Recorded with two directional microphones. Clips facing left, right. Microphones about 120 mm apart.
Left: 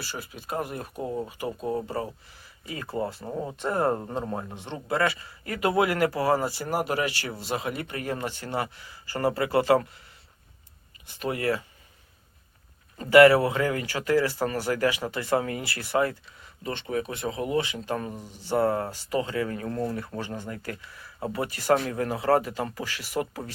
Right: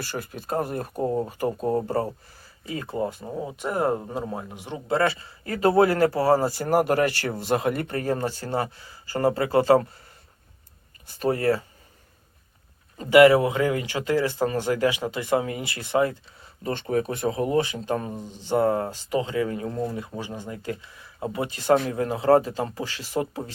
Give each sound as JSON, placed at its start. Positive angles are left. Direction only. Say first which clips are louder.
{"t": 0.0, "sound": "speech", "louder": "right 5 dB", "side_deg": -50}
{"t": 2.6, "sound": "speech", "louder": "right 3 dB", "side_deg": -25}
{"t": 3.2, "sound": "speech", "louder": "even", "side_deg": -5}
{"t": 4.9, "sound": "speech", "louder": "right 3 dB", "side_deg": -30}
{"t": 6.5, "sound": "speech", "louder": "right 6 dB", "side_deg": -45}
{"t": 11.0, "sound": "speech", "louder": "right 5 dB", "side_deg": -35}
{"t": 13.0, "sound": "speech", "louder": "right 1 dB", "side_deg": -20}
{"t": 16.6, "sound": "speech", "louder": "right 5 dB", "side_deg": -40}